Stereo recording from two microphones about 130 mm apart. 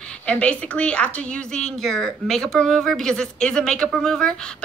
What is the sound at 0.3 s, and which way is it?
A woman's voice, 10° left (ahead or behind).